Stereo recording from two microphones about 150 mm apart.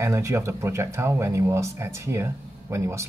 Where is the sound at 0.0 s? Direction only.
20° right (ahead or behind).